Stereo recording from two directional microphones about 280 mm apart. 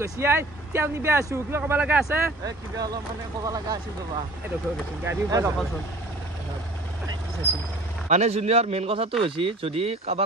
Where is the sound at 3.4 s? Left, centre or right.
Centre.